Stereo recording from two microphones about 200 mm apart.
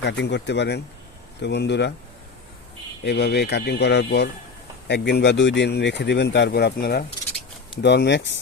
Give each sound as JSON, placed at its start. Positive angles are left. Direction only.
{"t": 0.0, "sound": "speech", "side_deg": 60}
{"t": 3.0, "sound": "speech", "side_deg": 55}